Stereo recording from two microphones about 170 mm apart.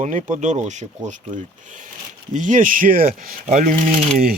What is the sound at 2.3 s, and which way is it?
Speech, 50° right (ahead or behind).